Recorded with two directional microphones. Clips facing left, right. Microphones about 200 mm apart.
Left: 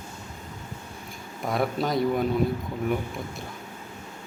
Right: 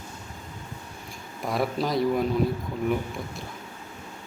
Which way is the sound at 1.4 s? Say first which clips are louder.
Even; centre (ahead or behind).